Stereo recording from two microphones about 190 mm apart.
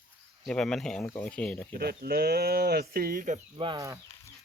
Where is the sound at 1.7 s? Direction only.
55° right (ahead or behind).